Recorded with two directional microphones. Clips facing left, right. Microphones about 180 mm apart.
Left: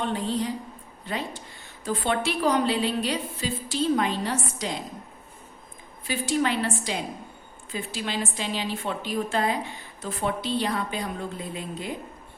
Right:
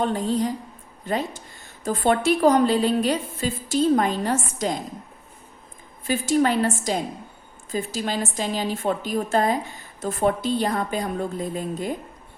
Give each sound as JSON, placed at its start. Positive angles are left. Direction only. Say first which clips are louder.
{"t": 0.0, "sound": "a woman's voice", "louder": "right 4 dB", "side_deg": -45}
{"t": 6.1, "sound": "a woman's voice", "louder": "right 5 dB", "side_deg": -45}